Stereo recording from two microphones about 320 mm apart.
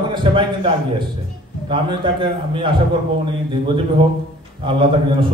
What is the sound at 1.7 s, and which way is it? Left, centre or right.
A man's voice, centre.